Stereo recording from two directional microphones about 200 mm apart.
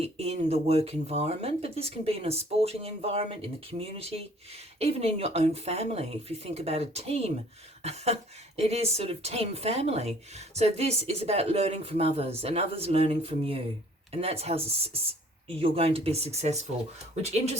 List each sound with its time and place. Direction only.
0.0 s speech: 30° right (ahead or behind)